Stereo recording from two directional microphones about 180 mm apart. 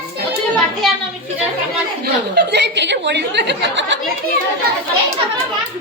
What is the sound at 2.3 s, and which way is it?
Speech, 70° right (ahead or behind).